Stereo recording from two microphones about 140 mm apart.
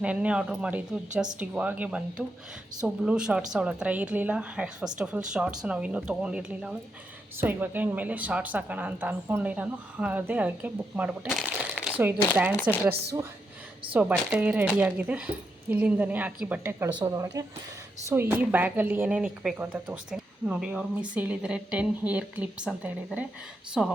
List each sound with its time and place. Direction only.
0.0 s a woman's voice: 10° right (ahead or behind)
13.9 s a woman's voice: 10° right (ahead or behind)
16.9 s a woman's voice: 30° right (ahead or behind)
18.1 s a woman's voice: 15° right (ahead or behind)